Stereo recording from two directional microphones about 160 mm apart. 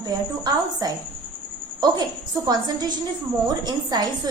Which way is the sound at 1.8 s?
25° right (ahead or behind).